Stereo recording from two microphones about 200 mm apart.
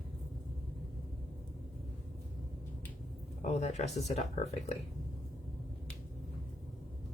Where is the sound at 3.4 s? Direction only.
35° left (ahead or behind).